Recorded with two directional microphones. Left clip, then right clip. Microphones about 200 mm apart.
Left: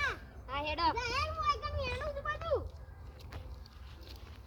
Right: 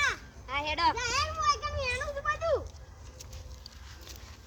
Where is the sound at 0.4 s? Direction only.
10° right (ahead or behind).